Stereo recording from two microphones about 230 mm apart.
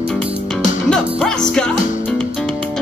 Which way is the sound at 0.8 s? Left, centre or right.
Centre.